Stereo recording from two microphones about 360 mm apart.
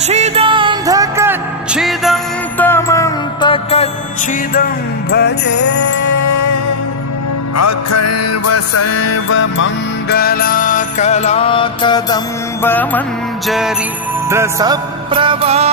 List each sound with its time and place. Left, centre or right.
0.1 s music: centre
5.1 s jingle bell: left
6.0 s music: left; by 15.7 s centre